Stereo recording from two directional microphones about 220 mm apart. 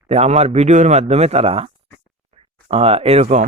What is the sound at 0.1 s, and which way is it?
Speech, 30° right (ahead or behind).